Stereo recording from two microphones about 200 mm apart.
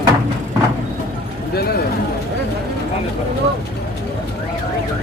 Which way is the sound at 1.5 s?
50° left (ahead or behind).